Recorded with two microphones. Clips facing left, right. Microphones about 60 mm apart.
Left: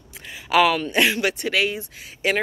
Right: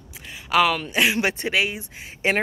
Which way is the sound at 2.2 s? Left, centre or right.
Right.